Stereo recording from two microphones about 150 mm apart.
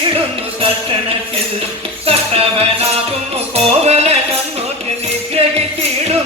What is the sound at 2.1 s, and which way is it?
Music, 40° right (ahead or behind).